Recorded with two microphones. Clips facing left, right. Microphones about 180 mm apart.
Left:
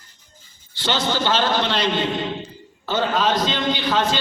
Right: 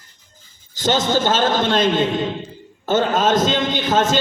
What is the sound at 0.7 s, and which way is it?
A man's voice, 45° right (ahead or behind).